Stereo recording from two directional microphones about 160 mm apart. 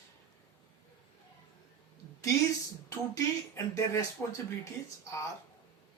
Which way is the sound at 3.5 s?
20° left (ahead or behind).